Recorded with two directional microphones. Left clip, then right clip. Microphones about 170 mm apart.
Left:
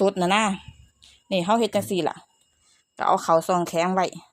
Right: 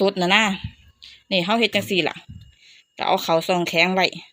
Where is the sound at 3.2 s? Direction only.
30° left (ahead or behind).